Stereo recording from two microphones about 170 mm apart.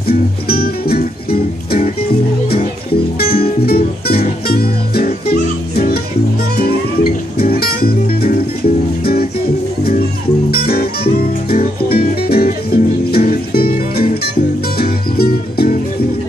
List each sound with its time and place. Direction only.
0.5 s music: 65° left (ahead or behind)
3.3 s music: 35° left (ahead or behind)
3.6 s music: 65° left (ahead or behind)
10.5 s music: 65° left (ahead or behind)